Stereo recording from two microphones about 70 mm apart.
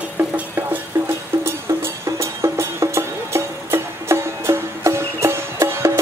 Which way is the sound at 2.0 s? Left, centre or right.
Right.